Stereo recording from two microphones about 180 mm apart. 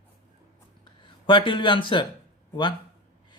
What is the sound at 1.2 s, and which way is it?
Speech, 30° left (ahead or behind).